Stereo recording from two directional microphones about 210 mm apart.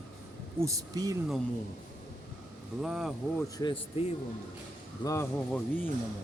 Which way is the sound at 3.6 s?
25° left (ahead or behind).